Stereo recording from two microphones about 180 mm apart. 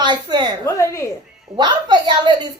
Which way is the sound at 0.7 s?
15° left (ahead or behind).